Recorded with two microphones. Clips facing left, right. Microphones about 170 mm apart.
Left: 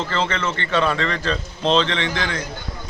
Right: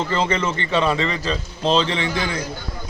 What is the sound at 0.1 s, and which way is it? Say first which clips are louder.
A man's voice: right 2 dB; 10° right (ahead or behind).